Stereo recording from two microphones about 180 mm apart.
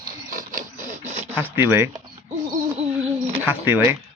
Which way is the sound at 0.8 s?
40° right (ahead or behind).